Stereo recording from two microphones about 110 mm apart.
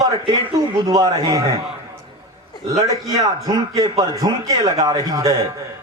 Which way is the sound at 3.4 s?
35° right (ahead or behind).